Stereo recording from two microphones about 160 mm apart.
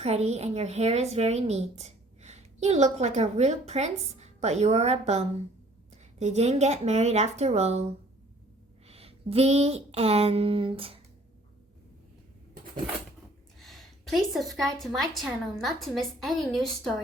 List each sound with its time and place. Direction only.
0.0 s speech: 40° right (ahead or behind)
8.9 s speech: 40° right (ahead or behind)
13.6 s a woman's voice: centre (ahead or behind)